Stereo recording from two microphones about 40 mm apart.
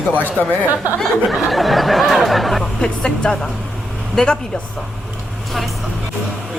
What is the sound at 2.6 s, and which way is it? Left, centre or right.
Speech, left.